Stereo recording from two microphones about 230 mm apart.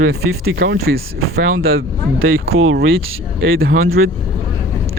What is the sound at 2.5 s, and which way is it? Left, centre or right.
Speech, right.